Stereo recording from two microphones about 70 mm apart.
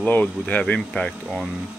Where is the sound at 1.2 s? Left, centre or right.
Centre.